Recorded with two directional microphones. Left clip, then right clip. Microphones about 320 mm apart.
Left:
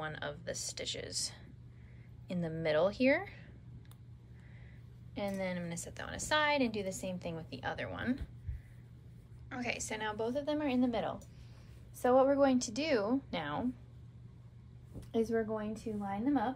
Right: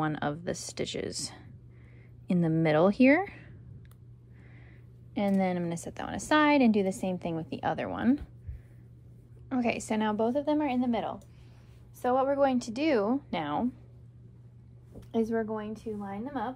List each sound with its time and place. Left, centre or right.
0.0 s a woman's voice: centre
5.4 s a woman's voice: centre
9.5 s a woman's voice: centre
15.0 s a woman's voice: right